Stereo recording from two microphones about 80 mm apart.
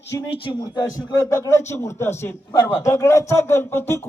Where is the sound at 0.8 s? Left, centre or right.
Left.